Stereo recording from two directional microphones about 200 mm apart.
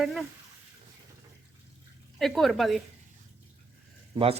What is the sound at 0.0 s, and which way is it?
Speech, centre (ahead or behind).